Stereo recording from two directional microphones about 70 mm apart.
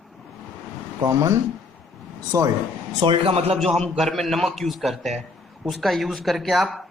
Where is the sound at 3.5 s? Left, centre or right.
Centre.